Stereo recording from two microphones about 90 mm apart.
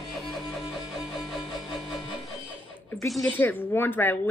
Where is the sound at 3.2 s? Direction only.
20° left (ahead or behind).